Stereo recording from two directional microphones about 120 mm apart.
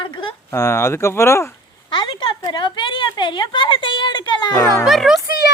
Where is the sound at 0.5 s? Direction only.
25° left (ahead or behind).